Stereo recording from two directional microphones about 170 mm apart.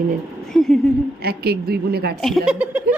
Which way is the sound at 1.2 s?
70° right (ahead or behind).